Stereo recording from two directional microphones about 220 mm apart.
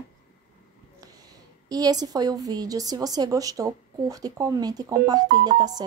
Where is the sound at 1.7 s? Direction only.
15° right (ahead or behind).